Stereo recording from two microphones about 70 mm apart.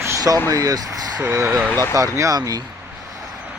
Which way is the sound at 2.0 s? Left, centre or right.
Right.